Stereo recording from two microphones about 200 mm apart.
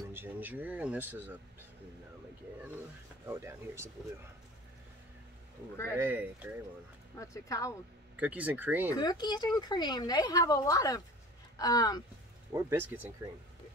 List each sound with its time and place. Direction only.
0.1 s speech: 10° right (ahead or behind)
3.3 s speech: 15° right (ahead or behind)
5.9 s speech: 10° right (ahead or behind)
7.2 s speech: 15° left (ahead or behind)
8.2 s speech: 5° right (ahead or behind)
8.9 s speech: 20° left (ahead or behind)
12.5 s speech: 10° right (ahead or behind)